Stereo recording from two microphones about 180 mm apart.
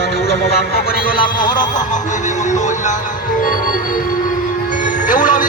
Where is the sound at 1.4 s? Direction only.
45° left (ahead or behind).